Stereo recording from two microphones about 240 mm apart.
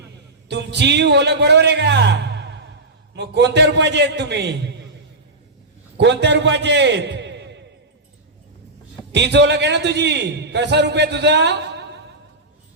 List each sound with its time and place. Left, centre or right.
0.4 s a man's voice: right
6.0 s a man's voice: right
9.1 s a man's voice: right